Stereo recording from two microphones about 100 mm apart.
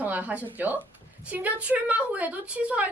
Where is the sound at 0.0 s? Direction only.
15° right (ahead or behind).